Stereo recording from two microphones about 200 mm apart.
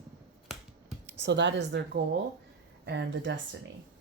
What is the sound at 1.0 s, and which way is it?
Speech, 60° right (ahead or behind).